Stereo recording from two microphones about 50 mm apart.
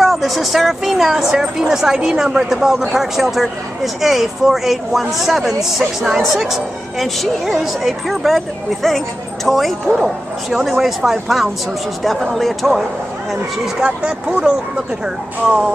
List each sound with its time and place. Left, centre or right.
0.0 s a woman's voice: centre
13.7 s speech: right